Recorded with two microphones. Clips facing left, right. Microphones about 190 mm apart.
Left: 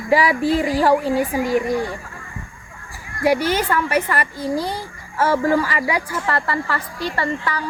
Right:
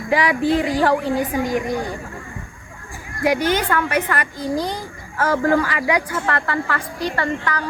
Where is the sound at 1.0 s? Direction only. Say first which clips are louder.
Left 1 dB; 30° left (ahead or behind).